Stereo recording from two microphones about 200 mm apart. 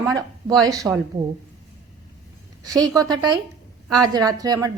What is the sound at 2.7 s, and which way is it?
A woman's voice, 20° right (ahead or behind).